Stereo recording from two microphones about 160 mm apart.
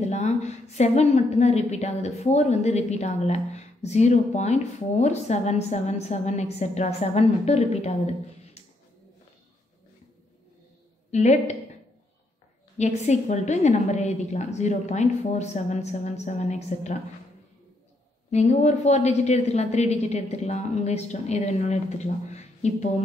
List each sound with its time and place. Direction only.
0.0 s a woman's voice: 45° left (ahead or behind)
11.1 s a woman's voice: 45° left (ahead or behind)
12.7 s a woman's voice: 45° left (ahead or behind)
18.3 s a woman's voice: 45° left (ahead or behind)